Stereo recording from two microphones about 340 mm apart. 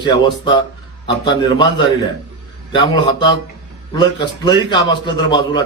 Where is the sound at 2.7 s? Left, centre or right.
Centre.